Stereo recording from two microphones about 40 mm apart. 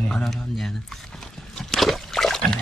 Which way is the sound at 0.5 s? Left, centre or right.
Centre.